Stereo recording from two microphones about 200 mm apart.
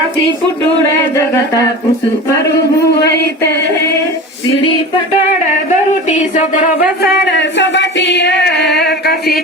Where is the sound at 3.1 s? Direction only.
55° left (ahead or behind).